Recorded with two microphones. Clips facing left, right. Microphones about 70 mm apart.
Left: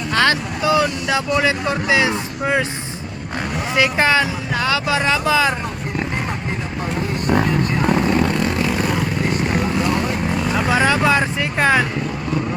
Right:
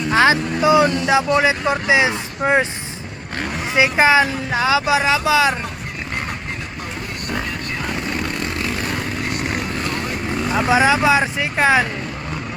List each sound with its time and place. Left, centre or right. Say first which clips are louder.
0.1 s speech: right 2 dB; centre
0.6 s speech: right 3 dB; right
3.8 s speech: right 2 dB; centre
10.5 s speech: right 3 dB; centre